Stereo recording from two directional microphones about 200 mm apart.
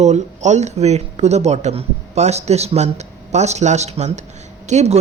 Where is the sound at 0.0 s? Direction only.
35° right (ahead or behind).